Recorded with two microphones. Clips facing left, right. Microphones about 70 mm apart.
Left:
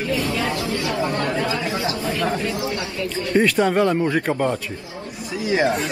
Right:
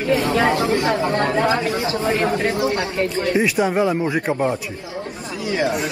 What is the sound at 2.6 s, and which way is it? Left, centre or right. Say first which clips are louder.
Speech: right 5 dB; right.